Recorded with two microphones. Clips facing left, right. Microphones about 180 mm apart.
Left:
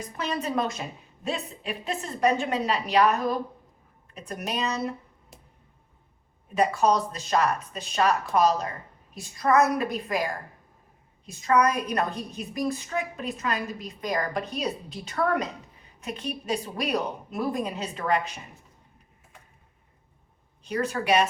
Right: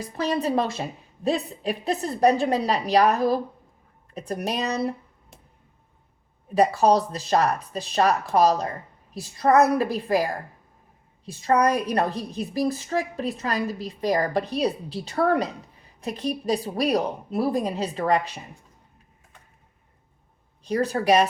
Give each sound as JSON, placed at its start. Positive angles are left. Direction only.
{"t": 0.0, "sound": "a woman's voice", "side_deg": -35}
{"t": 6.5, "sound": "a woman's voice", "side_deg": -35}
{"t": 11.3, "sound": "a woman's voice", "side_deg": -30}
{"t": 20.7, "sound": "a woman's voice", "side_deg": -35}